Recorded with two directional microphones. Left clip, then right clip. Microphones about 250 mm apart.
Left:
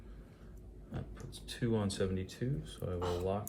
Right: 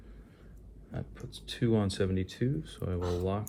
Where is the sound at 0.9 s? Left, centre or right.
Right.